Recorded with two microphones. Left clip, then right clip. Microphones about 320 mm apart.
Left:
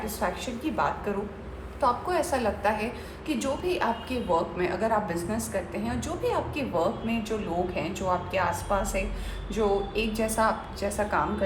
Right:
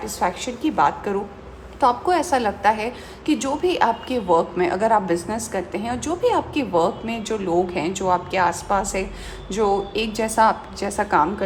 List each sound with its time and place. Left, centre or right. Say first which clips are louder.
0.0 s a woman's voice: right 7 dB; right